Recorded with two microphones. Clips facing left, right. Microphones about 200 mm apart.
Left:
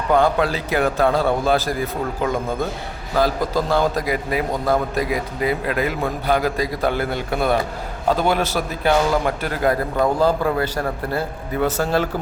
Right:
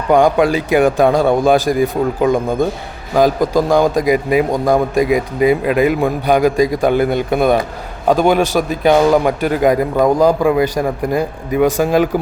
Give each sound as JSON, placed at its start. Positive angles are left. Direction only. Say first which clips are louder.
{"t": 0.1, "sound": "a man's voice", "louder": "right 6 dB", "side_deg": -15}